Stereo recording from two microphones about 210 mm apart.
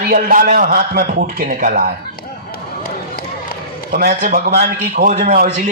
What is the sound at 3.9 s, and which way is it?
A man's voice, 45° right (ahead or behind).